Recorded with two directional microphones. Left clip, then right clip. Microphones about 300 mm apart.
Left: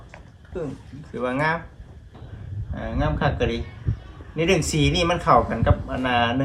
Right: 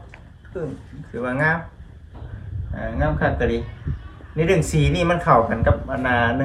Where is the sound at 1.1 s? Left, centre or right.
Centre.